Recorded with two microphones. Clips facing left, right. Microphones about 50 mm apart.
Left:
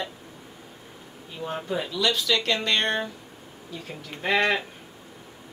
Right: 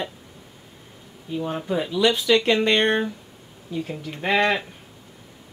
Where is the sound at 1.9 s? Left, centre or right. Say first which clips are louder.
Right 6 dB; right.